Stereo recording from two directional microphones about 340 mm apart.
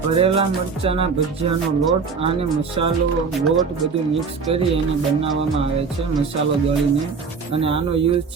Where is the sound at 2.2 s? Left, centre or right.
Centre.